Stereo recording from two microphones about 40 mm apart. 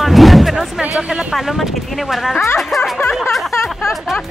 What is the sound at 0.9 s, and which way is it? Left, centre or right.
Speech, right.